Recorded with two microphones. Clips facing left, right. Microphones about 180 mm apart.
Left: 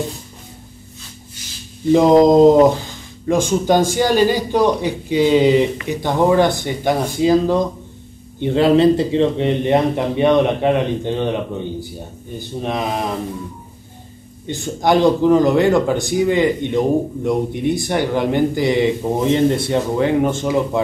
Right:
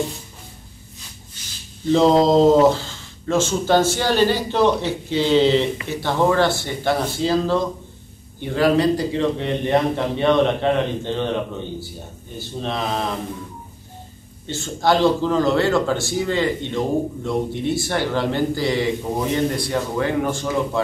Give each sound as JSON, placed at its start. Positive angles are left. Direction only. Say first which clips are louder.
{"t": 1.9, "sound": "a man's voice", "louder": "left 4 dB", "side_deg": 15}
{"t": 12.4, "sound": "speech", "louder": "left 3 dB", "side_deg": 15}
{"t": 14.5, "sound": "speech", "louder": "left 3 dB", "side_deg": 15}